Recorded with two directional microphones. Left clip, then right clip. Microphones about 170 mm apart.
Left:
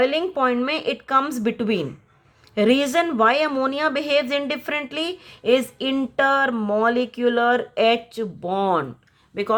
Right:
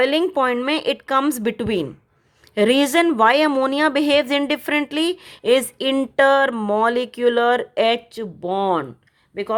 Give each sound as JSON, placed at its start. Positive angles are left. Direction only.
{"t": 0.0, "sound": "a woman's voice", "side_deg": -50}
{"t": 9.3, "sound": "speech", "side_deg": -25}